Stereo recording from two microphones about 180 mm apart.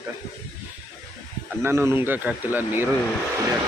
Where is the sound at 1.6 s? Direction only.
15° right (ahead or behind).